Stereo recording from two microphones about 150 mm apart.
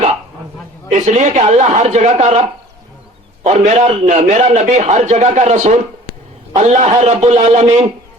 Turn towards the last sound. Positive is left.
turn(degrees=-45)  # may be behind; listen again after turning